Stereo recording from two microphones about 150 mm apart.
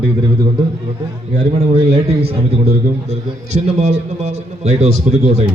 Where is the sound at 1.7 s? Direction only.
40° right (ahead or behind).